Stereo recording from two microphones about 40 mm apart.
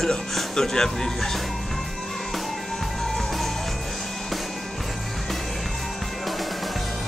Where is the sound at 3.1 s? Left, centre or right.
Centre.